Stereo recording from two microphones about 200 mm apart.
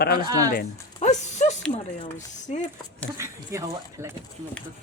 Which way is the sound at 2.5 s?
35° left (ahead or behind).